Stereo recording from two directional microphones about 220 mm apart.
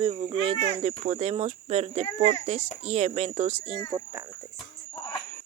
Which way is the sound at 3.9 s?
15° right (ahead or behind).